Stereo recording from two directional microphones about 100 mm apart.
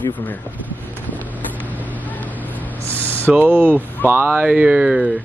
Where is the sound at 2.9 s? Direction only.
15° left (ahead or behind).